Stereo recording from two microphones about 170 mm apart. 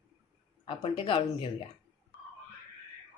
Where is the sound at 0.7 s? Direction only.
30° left (ahead or behind).